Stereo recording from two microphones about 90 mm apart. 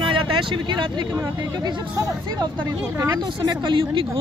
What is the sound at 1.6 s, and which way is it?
Speech, 45° right (ahead or behind).